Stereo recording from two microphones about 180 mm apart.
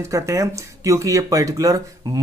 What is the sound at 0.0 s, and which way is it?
Speech, 15° right (ahead or behind).